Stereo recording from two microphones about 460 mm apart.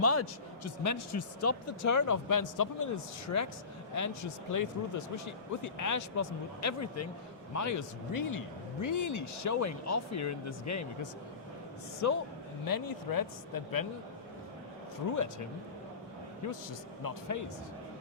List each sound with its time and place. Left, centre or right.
0.0 s speech: left
15.1 s speech: left
17.0 s speech: left